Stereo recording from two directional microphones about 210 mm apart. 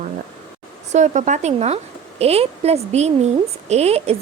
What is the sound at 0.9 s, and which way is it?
Speech, 35° right (ahead or behind).